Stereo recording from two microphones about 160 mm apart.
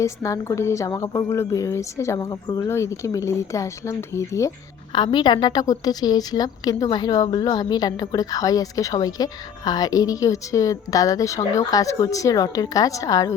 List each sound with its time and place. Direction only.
0.0 s a woman's voice: 20° left (ahead or behind)
4.9 s a woman's voice: 30° left (ahead or behind)